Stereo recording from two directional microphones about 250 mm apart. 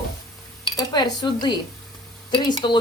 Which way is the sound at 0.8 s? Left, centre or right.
Centre.